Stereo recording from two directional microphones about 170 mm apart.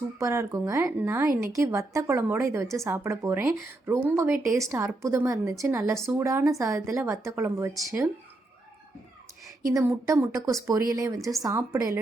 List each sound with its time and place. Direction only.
0.2 s speech: 15° right (ahead or behind)
9.6 s speech: 15° right (ahead or behind)